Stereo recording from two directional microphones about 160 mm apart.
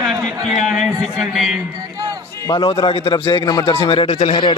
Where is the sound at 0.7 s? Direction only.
Centre (ahead or behind).